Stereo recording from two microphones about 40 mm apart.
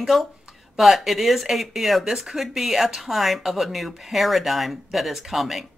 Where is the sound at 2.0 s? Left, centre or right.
Centre.